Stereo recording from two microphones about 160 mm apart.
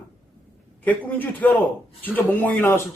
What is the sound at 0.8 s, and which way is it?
A man's voice, 10° left (ahead or behind).